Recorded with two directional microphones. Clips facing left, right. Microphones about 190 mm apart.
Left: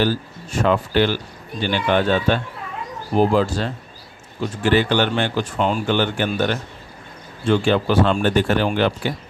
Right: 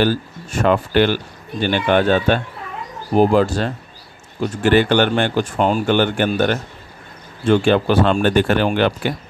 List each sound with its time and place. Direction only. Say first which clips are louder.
0.0 s speech: right 3 dB; 55° right (ahead or behind)